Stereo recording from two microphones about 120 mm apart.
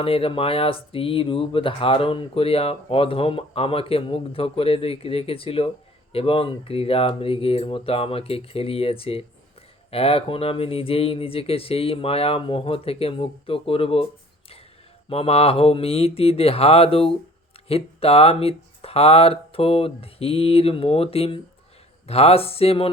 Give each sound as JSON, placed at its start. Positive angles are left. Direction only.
{"t": 0.0, "sound": "speech", "side_deg": 50}
{"t": 15.1, "sound": "speech", "side_deg": 55}